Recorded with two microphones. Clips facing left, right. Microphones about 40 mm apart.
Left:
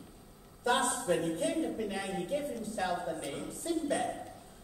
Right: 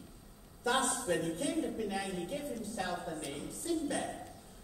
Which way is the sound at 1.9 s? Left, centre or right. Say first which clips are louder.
Left 1 dB; centre.